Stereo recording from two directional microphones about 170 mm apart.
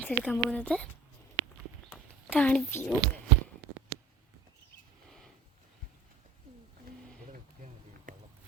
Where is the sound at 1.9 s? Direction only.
10° left (ahead or behind).